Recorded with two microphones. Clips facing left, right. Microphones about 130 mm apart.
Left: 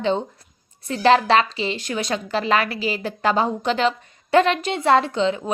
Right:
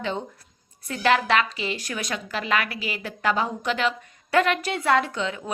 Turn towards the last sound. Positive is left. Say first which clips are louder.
# left 7 dB
turn(degrees=25)  # may be behind; listen again after turning